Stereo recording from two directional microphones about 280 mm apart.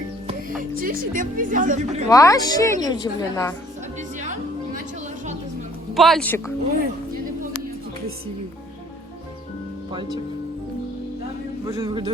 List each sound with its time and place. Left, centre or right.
0.6 s speech: right
2.0 s speech: centre
5.9 s a woman's voice: centre
9.9 s speech: centre
11.6 s speech: centre